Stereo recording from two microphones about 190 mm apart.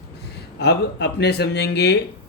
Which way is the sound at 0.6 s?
60° left (ahead or behind).